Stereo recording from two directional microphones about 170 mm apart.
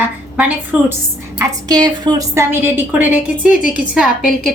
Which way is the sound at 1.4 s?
20° right (ahead or behind).